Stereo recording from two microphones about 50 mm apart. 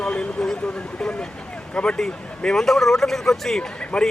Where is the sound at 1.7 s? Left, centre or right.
Left.